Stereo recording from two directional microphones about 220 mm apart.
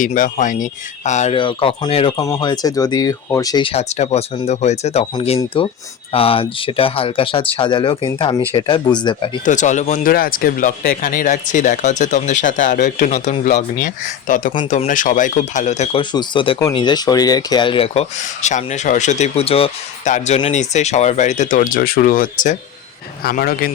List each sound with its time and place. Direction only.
0.0 s speech: 35° left (ahead or behind); by 9.4 s 20° left (ahead or behind)
9.4 s speech: 35° left (ahead or behind)